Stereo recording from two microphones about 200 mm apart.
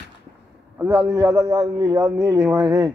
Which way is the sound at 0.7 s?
10° right (ahead or behind).